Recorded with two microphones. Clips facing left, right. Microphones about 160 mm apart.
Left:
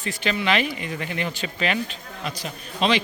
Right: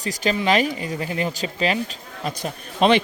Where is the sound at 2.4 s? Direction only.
55° right (ahead or behind).